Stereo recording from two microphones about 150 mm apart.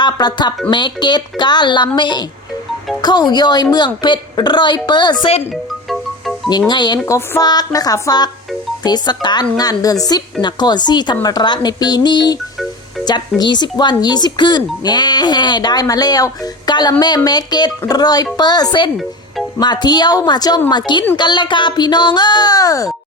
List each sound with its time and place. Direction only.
0.0 s a woman's voice: 30° left (ahead or behind)
6.7 s speech: 30° left (ahead or behind)